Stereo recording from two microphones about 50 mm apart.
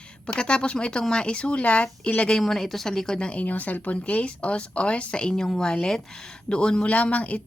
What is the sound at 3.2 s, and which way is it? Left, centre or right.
Speech, left.